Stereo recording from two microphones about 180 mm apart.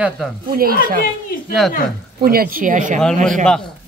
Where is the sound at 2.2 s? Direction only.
55° right (ahead or behind).